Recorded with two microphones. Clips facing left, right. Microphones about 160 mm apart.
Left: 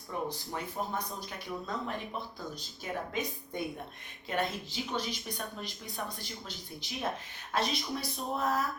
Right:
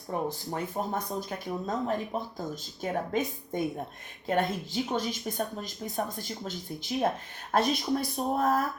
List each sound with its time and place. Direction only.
0.1 s speech: 45° right (ahead or behind)